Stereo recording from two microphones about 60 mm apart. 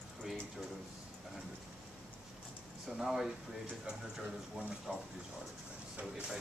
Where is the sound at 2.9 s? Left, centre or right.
Centre.